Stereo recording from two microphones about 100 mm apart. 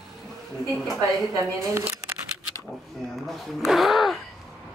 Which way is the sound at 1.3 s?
25° right (ahead or behind).